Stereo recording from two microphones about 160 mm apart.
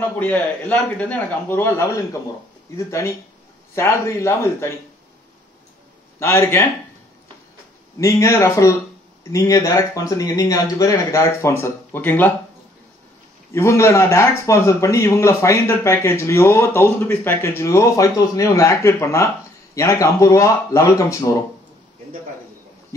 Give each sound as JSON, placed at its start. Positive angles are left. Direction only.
{"t": 0.2, "sound": "speech", "side_deg": 10}
{"t": 6.1, "sound": "speech", "side_deg": 15}
{"t": 8.0, "sound": "speech", "side_deg": 20}
{"t": 13.5, "sound": "speech", "side_deg": 15}